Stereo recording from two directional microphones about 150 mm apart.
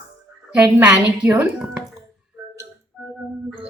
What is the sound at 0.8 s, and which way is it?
Speech, 10° right (ahead or behind).